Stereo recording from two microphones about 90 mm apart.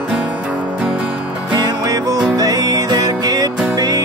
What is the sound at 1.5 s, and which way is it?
Music, 45° right (ahead or behind).